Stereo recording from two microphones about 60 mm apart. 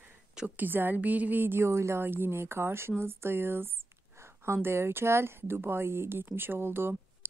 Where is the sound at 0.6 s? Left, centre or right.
Right.